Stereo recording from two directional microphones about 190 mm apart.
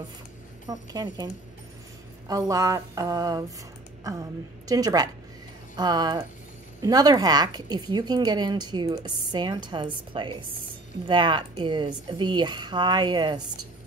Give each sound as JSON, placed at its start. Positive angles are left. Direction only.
{"t": 0.7, "sound": "a woman's voice", "side_deg": -20}